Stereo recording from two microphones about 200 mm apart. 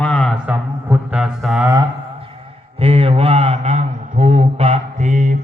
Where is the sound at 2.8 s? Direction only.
30° right (ahead or behind).